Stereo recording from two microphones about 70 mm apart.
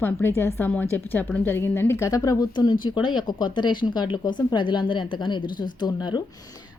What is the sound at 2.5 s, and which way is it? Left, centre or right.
Speech, left.